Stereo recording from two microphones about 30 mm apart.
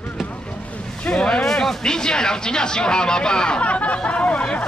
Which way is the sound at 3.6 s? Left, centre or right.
Left.